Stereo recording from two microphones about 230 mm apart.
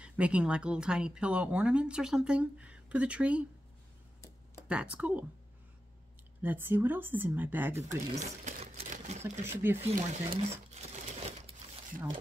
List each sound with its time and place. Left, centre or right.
0.0 s speech: centre
4.6 s speech: centre
6.4 s speech: centre
8.1 s sewing machine: right
9.2 s speech: centre
9.8 s crumpling: right